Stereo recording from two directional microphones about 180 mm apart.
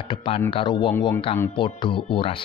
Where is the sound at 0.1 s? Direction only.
25° left (ahead or behind).